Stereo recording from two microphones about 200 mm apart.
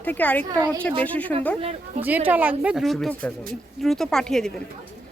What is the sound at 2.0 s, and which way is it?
A woman's voice, 10° right (ahead or behind).